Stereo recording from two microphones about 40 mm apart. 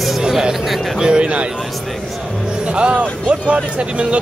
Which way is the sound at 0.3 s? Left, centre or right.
Centre.